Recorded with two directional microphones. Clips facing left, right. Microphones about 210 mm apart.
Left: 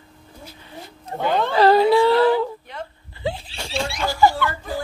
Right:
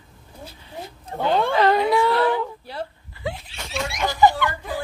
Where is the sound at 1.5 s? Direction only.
35° left (ahead or behind).